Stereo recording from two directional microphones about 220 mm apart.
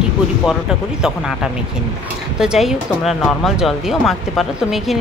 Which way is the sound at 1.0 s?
5° right (ahead or behind).